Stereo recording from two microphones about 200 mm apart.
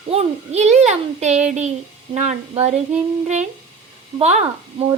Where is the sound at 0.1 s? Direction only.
30° right (ahead or behind).